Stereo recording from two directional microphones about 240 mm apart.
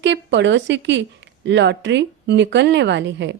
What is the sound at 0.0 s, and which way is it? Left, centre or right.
A woman's voice, right.